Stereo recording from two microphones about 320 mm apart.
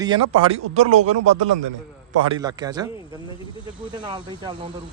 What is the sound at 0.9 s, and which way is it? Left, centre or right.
Speech, right.